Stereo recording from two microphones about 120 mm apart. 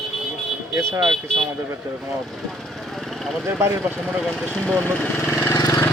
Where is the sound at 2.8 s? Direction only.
Centre (ahead or behind).